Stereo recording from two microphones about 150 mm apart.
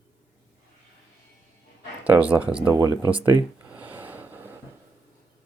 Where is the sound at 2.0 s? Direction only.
10° right (ahead or behind).